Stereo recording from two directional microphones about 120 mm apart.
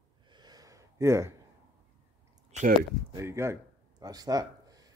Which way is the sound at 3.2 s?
20° right (ahead or behind).